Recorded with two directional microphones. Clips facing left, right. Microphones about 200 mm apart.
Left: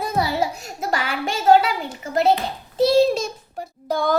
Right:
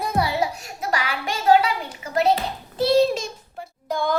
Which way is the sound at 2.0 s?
30° left (ahead or behind).